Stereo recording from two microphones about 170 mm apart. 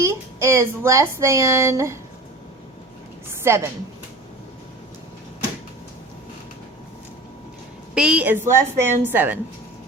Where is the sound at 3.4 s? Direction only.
15° right (ahead or behind).